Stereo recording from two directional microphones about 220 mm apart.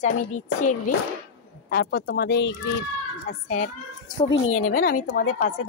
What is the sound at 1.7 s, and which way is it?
Speech, 45° left (ahead or behind).